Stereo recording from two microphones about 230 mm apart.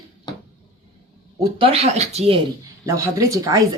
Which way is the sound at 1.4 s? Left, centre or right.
Right.